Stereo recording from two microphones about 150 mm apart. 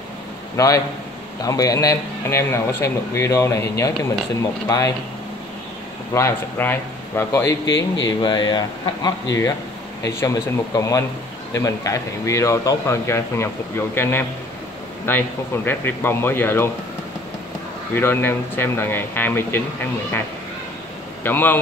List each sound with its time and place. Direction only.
0.6 s speech: 20° left (ahead or behind)
6.1 s speech: 15° left (ahead or behind)
8.2 s speech: 30° left (ahead or behind)
17.9 s speech: 15° left (ahead or behind)
21.2 s a man's voice: 15° left (ahead or behind)